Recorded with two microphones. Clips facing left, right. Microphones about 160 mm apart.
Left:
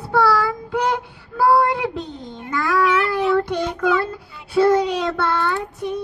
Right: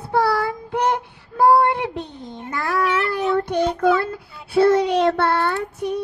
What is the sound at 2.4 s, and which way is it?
Child singing, 30° right (ahead or behind).